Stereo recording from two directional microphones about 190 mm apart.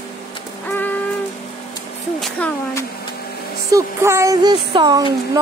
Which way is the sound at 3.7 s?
15° right (ahead or behind).